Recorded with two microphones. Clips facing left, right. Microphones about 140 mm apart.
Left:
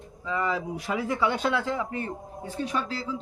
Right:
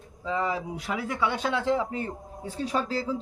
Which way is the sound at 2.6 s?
40° right (ahead or behind).